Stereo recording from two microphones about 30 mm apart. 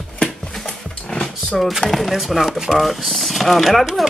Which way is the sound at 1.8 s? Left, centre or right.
Centre.